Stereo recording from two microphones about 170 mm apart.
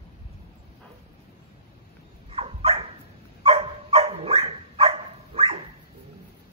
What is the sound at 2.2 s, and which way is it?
Dog, 35° right (ahead or behind).